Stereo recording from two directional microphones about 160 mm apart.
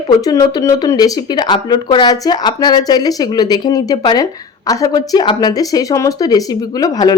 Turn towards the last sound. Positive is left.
turn(degrees=25)  # may be behind; listen again after turning